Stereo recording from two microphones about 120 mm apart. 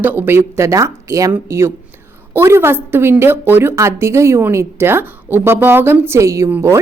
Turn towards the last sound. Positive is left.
turn(degrees=-25)  # may be behind; listen again after turning